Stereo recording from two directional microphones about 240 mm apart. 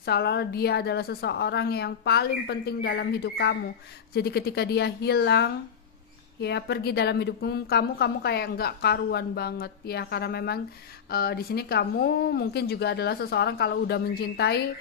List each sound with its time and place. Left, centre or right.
0.0 s a woman's voice: left